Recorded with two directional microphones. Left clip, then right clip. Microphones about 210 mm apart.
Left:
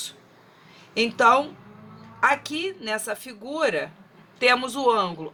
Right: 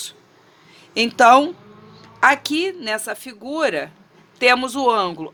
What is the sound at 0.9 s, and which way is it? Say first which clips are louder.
Speech: right 6 dB; 50° right (ahead or behind).